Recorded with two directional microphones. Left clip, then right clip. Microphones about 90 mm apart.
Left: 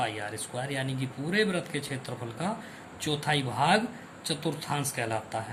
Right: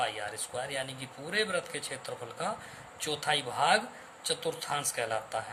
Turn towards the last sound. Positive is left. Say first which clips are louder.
# left 1 dB
turn(degrees=-45)  # may be behind; listen again after turning